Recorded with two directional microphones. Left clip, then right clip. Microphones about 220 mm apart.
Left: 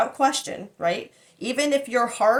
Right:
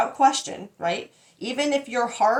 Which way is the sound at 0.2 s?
25° left (ahead or behind).